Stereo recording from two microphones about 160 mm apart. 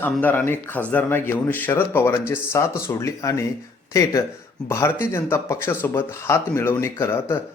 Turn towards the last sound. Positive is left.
turn(degrees=15)  # may be behind; listen again after turning